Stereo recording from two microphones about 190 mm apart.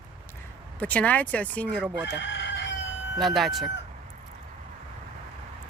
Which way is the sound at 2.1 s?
70° left (ahead or behind).